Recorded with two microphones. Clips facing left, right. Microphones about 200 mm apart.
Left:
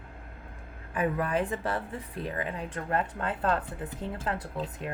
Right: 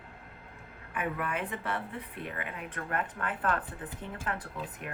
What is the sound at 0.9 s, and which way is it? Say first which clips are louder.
A woman's voice: left 6 dB; 35° left (ahead or behind).